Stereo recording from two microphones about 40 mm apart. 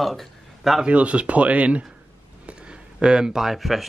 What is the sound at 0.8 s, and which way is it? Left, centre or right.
Speech, right.